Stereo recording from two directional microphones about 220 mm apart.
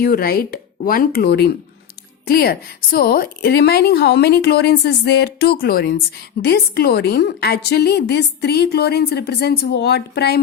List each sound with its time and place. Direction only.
0.0 s a woman's voice: 40° left (ahead or behind)